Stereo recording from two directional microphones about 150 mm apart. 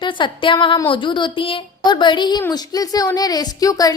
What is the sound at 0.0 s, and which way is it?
A woman's voice, 35° left (ahead or behind).